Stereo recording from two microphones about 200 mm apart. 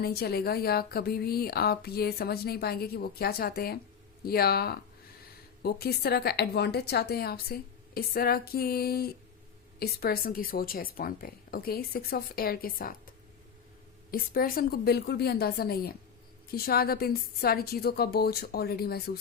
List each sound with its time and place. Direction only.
0.0 s a woman's voice: 50° left (ahead or behind)